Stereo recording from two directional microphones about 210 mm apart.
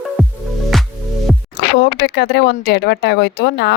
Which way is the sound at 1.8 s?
55° left (ahead or behind).